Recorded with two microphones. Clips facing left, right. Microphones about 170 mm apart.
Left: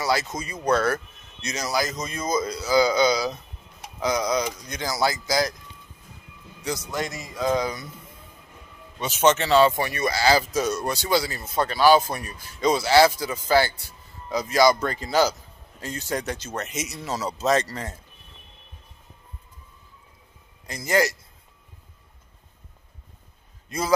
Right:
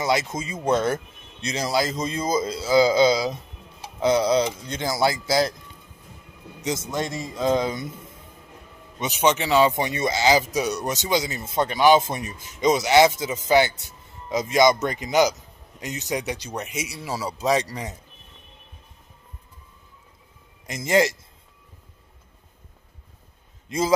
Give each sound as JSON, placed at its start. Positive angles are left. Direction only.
{"t": 0.0, "sound": "speech", "side_deg": -25}
{"t": 6.6, "sound": "speech", "side_deg": -20}
{"t": 9.0, "sound": "speech", "side_deg": -10}
{"t": 20.6, "sound": "speech", "side_deg": -25}